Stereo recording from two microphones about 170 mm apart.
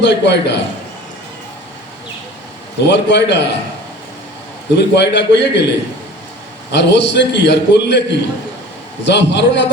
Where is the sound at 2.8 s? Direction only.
90° left.